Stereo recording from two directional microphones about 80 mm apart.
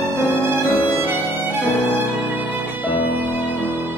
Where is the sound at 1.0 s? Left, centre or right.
Right.